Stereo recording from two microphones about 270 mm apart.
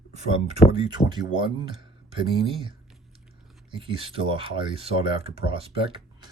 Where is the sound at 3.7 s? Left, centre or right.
Centre.